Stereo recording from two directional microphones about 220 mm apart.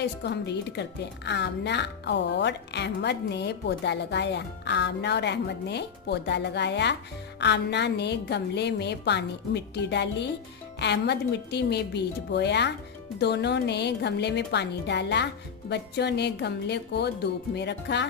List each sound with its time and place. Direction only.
0.0 s a woman's voice: 50° left (ahead or behind)